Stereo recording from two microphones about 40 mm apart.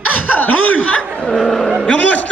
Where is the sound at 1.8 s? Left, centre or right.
Left.